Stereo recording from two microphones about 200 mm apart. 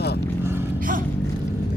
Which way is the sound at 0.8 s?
45° right (ahead or behind).